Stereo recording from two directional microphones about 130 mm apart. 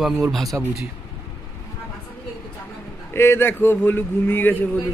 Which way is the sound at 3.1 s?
20° left (ahead or behind).